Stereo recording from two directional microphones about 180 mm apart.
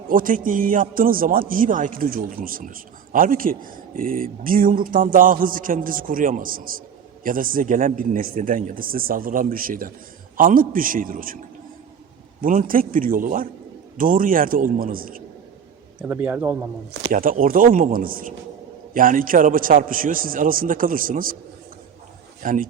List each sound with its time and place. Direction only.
0.1 s a man's voice: 50° right (ahead or behind)
12.4 s a man's voice: 50° right (ahead or behind)
16.0 s a man's voice: 10° right (ahead or behind)
17.1 s a man's voice: 50° right (ahead or behind)
22.4 s a man's voice: 50° right (ahead or behind)